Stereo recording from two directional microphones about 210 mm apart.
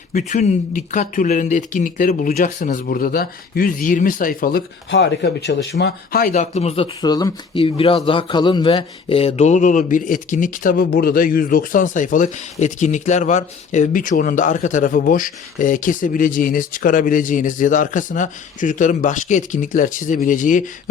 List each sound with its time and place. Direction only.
0.1 s speech: 35° left (ahead or behind)
4.9 s speech: 55° left (ahead or behind)
5.8 s speech: 45° left (ahead or behind)